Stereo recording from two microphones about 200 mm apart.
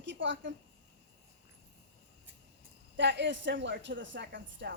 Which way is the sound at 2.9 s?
60° right (ahead or behind).